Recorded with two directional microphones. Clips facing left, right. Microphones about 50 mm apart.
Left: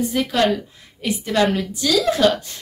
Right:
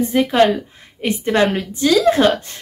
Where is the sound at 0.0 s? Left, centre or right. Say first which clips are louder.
Right 5 dB; right.